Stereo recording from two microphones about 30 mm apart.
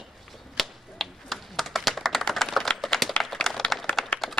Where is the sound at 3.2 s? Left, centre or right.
Left.